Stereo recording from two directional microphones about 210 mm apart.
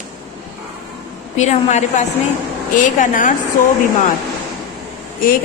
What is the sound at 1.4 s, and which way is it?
Speech, 35° left (ahead or behind).